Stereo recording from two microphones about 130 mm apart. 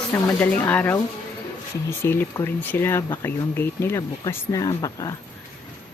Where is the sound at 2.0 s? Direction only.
20° left (ahead or behind).